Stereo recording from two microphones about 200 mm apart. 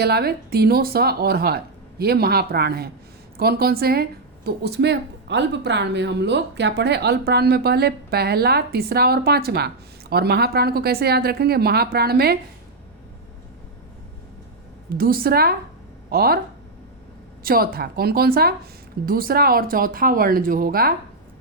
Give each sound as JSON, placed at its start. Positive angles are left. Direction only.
{"t": 0.0, "sound": "speech", "side_deg": -55}
{"t": 14.8, "sound": "speech", "side_deg": -45}
{"t": 17.4, "sound": "speech", "side_deg": -50}